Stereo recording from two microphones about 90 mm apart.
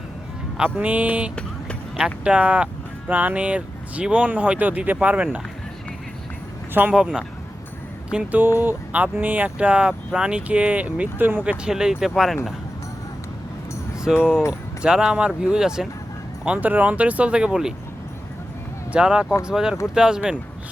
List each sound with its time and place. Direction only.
0.5 s speech: 15° right (ahead or behind)
6.9 s speech: 10° right (ahead or behind)
11.6 s speech: 5° right (ahead or behind)
14.1 s speech: 5° right (ahead or behind)
18.9 s speech: 10° right (ahead or behind)